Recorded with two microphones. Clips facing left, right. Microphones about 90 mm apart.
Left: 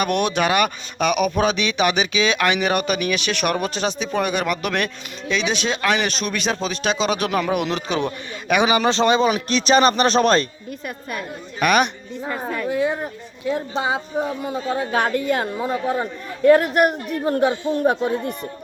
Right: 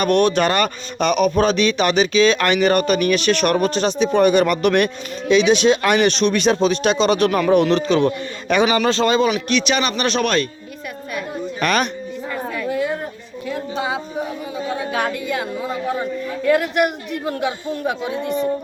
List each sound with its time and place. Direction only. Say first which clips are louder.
0.0 s speech: right 4 dB; 10° left (ahead or behind)
9.3 s a man's voice: left 2 dB; 35° left (ahead or behind)
11.6 s speech: left 2 dB; 15° left (ahead or behind)
12.3 s a sound: even; 25° left (ahead or behind)
14.9 s a man's voice: left 3 dB; 40° left (ahead or behind)